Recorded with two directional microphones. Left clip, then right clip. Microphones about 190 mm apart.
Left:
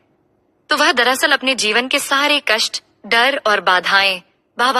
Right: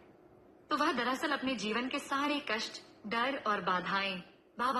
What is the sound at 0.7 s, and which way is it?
A woman's voice, 60° left (ahead or behind).